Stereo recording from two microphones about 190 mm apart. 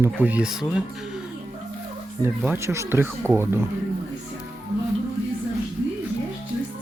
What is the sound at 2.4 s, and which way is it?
Speech, 10° right (ahead or behind).